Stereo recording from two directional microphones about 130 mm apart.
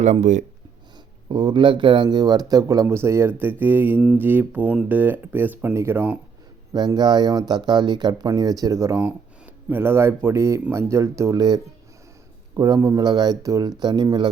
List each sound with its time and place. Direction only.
0.0 s speech: 65° right (ahead or behind)
1.3 s speech: 35° right (ahead or behind); by 6.1 s 15° right (ahead or behind)
6.7 s speech: 35° right (ahead or behind)